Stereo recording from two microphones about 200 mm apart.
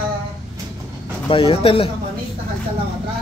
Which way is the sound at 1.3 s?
25° left (ahead or behind).